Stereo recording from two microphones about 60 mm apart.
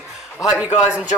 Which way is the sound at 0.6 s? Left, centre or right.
Right.